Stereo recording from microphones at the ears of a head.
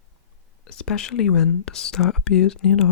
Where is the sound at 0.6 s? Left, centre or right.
Left.